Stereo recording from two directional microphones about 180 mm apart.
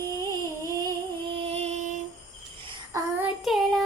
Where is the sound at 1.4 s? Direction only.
35° right (ahead or behind).